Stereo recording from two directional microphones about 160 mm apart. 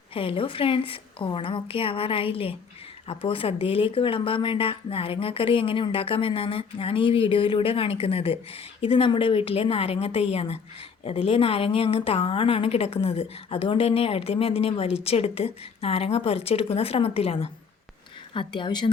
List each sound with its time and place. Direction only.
0.1 s a woman's voice: 35° left (ahead or behind)